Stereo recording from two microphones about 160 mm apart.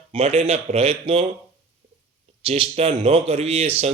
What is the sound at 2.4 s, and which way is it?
Speech, 40° right (ahead or behind).